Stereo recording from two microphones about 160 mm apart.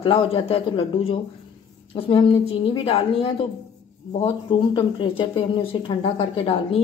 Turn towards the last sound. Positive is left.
turn(degrees=35)  # may be behind; listen again after turning